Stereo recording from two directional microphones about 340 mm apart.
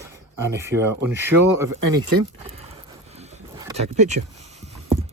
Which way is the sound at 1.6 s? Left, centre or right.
Right.